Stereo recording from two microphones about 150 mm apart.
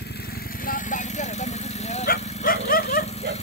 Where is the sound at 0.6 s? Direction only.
65° left (ahead or behind).